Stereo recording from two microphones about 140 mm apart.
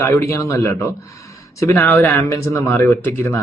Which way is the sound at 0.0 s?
20° left (ahead or behind).